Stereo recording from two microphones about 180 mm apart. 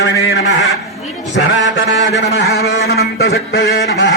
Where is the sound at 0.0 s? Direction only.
75° left (ahead or behind).